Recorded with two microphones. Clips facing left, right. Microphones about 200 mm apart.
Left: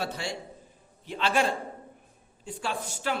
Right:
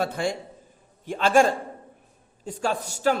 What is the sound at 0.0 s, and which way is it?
A man's voice, 50° right (ahead or behind).